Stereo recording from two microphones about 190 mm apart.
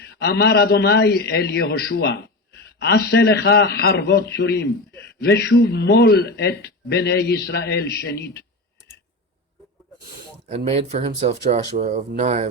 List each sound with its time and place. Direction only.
0.0 s a man's voice: 60° left (ahead or behind)
10.7 s speech: 35° right (ahead or behind)